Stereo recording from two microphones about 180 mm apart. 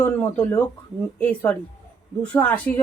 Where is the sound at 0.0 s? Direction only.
10° left (ahead or behind).